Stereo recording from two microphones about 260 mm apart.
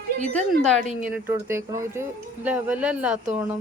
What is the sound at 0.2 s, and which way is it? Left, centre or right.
Speech, right.